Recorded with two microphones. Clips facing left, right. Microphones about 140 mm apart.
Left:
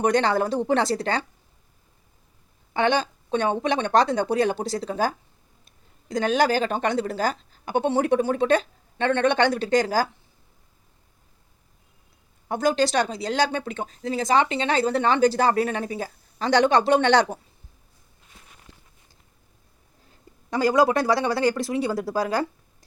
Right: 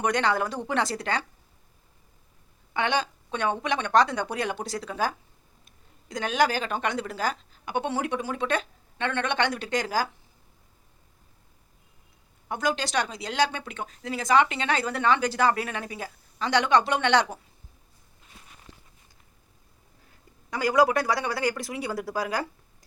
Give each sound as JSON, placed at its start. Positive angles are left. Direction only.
{"t": 0.0, "sound": "speech", "side_deg": 30}
{"t": 2.7, "sound": "speech", "side_deg": 35}
{"t": 12.5, "sound": "speech", "side_deg": 35}
{"t": 20.5, "sound": "speech", "side_deg": 30}